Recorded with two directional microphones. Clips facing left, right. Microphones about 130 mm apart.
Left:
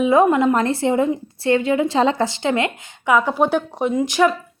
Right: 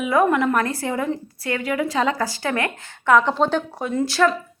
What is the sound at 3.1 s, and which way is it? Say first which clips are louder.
A woman's voice: even; 10° left (ahead or behind).